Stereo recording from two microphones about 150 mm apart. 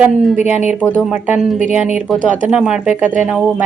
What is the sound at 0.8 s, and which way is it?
Speech, 10° left (ahead or behind).